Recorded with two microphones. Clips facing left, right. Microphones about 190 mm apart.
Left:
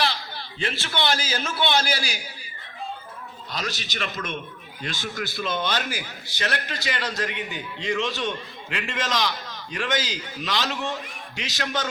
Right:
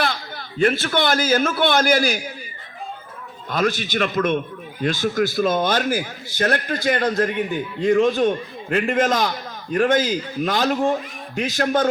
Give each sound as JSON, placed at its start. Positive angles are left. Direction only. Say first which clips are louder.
{"t": 0.0, "sound": "a man's voice", "louder": "right 3 dB", "side_deg": -50}
{"t": 3.5, "sound": "a man's voice", "louder": "right 11 dB", "side_deg": -50}